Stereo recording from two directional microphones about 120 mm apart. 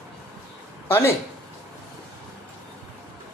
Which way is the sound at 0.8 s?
20° left (ahead or behind).